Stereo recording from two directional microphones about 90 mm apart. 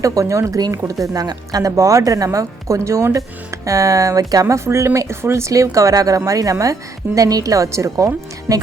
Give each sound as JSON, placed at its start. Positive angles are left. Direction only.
{"t": 0.0, "sound": "speech", "side_deg": -40}